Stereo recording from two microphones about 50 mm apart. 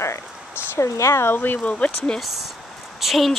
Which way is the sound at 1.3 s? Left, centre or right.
Left.